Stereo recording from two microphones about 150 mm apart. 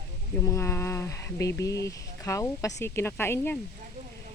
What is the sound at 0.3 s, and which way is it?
Speech, 20° left (ahead or behind).